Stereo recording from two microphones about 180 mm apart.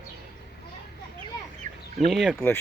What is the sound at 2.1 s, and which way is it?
Speech, centre (ahead or behind).